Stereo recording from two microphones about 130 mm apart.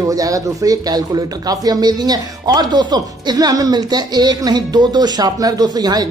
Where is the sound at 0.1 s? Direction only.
25° right (ahead or behind).